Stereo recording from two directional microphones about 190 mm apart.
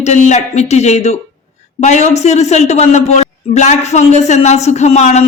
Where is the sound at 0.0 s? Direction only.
40° left (ahead or behind).